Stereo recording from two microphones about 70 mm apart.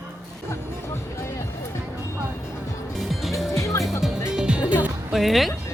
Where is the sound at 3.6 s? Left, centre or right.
Left.